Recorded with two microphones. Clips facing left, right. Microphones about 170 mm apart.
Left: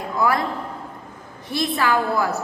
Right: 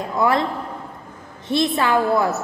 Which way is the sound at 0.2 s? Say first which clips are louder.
Right 2 dB; 25° right (ahead or behind).